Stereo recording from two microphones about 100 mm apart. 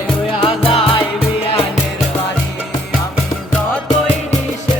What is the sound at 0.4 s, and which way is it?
Music, 65° left (ahead or behind).